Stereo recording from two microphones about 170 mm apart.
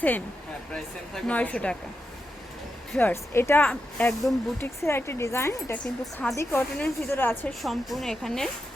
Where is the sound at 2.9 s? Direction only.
10° left (ahead or behind).